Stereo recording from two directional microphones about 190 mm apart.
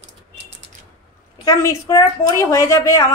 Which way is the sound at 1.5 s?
15° left (ahead or behind).